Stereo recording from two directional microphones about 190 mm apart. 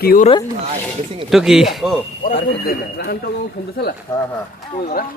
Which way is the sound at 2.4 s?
55° left (ahead or behind).